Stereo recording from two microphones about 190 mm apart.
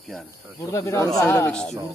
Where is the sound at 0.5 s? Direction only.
15° left (ahead or behind).